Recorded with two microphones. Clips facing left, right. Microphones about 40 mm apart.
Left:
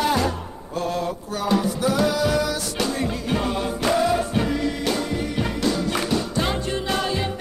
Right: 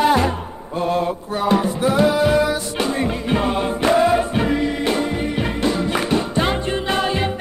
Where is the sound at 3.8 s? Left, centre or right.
Right.